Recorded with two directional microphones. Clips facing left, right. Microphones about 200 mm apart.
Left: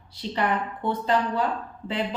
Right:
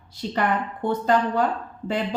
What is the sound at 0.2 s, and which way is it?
A woman's voice, 45° right (ahead or behind).